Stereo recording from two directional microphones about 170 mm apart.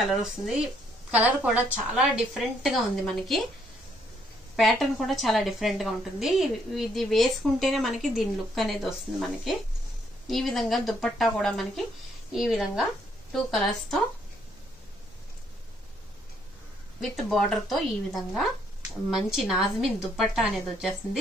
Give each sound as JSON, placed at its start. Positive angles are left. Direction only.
{"t": 0.1, "sound": "a woman's voice", "side_deg": -5}
{"t": 4.6, "sound": "a woman's voice", "side_deg": 0}
{"t": 17.0, "sound": "a woman's voice", "side_deg": 0}